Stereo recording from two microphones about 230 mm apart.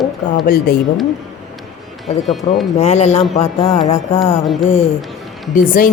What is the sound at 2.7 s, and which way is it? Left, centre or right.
Speech, left.